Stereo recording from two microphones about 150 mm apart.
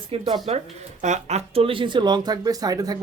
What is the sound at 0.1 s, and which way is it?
Speech, 35° right (ahead or behind).